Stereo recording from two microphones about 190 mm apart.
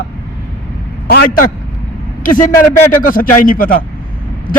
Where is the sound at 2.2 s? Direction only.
45° left (ahead or behind).